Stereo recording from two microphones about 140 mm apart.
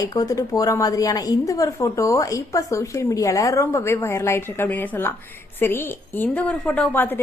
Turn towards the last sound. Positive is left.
turn(degrees=15)  # may be behind; listen again after turning